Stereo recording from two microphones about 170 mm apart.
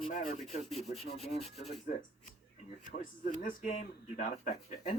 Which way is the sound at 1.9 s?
55° left (ahead or behind).